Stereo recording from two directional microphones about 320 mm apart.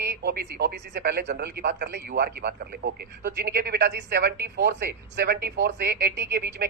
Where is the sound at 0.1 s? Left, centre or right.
Right.